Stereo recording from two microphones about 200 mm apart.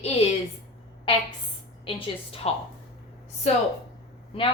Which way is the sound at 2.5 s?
30° left (ahead or behind).